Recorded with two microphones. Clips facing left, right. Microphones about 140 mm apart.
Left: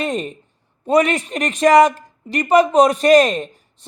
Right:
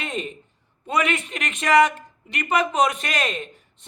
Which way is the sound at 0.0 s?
40° left (ahead or behind).